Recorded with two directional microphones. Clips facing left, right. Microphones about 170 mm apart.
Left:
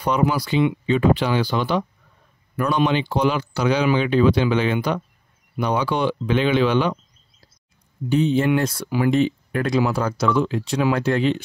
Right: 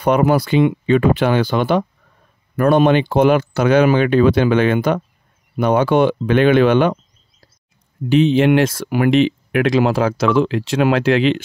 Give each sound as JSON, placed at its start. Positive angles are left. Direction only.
{"t": 0.0, "sound": "speech", "side_deg": -55}
{"t": 8.1, "sound": "speech", "side_deg": -85}